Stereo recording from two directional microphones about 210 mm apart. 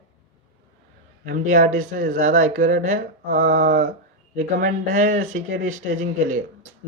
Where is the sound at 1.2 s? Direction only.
40° right (ahead or behind).